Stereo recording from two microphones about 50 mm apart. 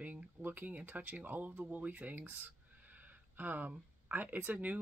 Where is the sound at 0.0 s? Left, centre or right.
Right.